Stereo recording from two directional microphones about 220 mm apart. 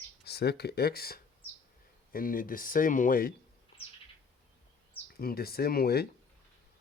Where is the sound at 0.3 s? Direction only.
45° left (ahead or behind).